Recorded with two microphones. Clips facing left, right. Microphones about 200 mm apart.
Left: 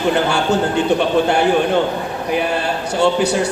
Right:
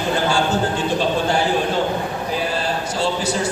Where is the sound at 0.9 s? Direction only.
65° left (ahead or behind).